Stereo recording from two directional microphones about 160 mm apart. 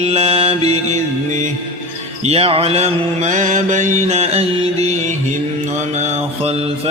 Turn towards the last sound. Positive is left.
turn(degrees=-40)  # may be behind; listen again after turning